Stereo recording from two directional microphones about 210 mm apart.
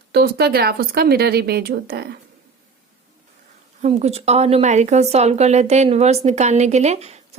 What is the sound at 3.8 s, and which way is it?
A woman's voice, 30° right (ahead or behind).